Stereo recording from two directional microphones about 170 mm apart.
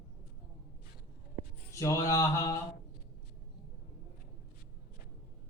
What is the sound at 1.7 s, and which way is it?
Mantra, 20° left (ahead or behind).